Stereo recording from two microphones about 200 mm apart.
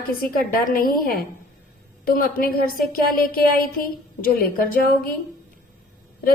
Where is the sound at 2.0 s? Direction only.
45° left (ahead or behind).